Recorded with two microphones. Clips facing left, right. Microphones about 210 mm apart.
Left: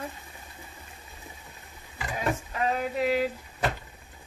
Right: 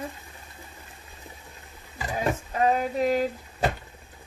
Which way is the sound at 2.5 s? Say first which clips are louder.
Right 7 dB; 45° right (ahead or behind).